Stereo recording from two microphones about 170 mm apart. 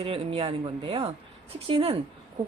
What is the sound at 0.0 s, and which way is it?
A woman's voice, 35° right (ahead or behind).